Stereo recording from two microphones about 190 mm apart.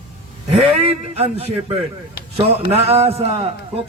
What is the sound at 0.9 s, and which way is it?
A man's voice, 30° right (ahead or behind).